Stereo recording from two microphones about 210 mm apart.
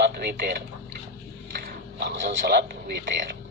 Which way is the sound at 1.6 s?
55° right (ahead or behind).